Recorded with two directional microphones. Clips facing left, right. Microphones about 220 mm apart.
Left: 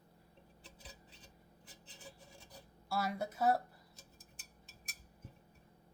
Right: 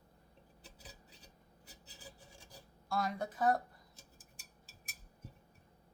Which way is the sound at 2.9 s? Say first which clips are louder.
Right 1 dB; 5° left (ahead or behind).